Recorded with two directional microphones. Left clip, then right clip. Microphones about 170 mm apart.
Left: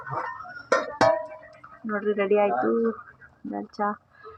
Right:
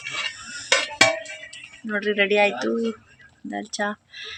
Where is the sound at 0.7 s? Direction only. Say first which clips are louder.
Right 2 dB; 10° right (ahead or behind).